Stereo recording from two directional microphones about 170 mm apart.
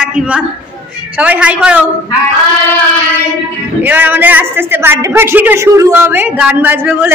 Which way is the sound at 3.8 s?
10° right (ahead or behind).